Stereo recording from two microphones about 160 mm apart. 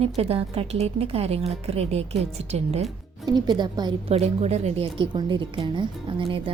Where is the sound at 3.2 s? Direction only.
25° right (ahead or behind).